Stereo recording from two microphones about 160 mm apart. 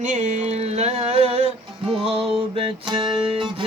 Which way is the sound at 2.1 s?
Centre (ahead or behind).